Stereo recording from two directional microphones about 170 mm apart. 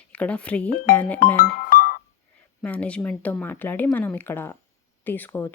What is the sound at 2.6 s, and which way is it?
Speech, 5° left (ahead or behind).